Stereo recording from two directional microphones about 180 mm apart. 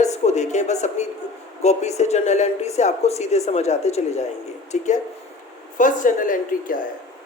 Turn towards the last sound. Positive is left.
turn(degrees=50)  # may be behind; listen again after turning